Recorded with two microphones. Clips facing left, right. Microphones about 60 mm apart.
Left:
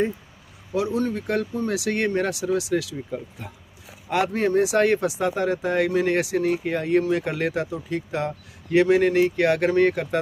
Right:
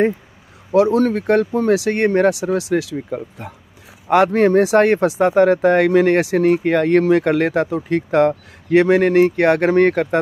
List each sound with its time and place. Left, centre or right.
0.7 s speech: right
1.1 s speech: right
5.3 s speech: right